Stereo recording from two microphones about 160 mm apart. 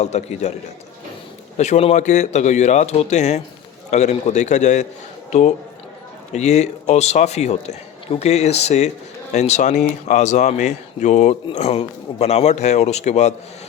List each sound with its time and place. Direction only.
0.0 s a man's voice: 45° left (ahead or behind)
1.5 s a man's voice: 45° left (ahead or behind)
6.3 s a man's voice: 45° left (ahead or behind)